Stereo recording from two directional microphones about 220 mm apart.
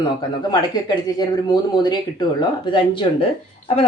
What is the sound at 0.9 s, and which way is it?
Speech, 20° left (ahead or behind).